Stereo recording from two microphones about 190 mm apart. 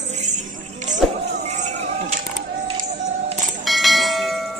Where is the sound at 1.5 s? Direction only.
40° right (ahead or behind).